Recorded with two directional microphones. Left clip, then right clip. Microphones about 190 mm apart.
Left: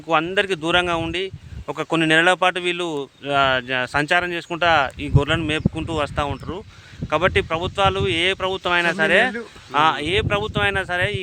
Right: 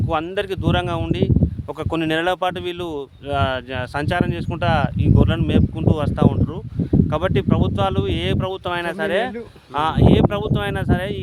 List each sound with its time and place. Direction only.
0.1 s speech: 10° left (ahead or behind)